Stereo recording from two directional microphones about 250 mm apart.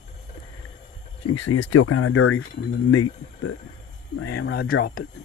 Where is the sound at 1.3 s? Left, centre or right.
Left.